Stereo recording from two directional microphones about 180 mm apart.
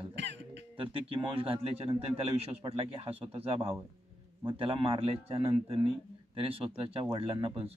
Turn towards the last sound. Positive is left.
turn(degrees=-30)  # may be behind; listen again after turning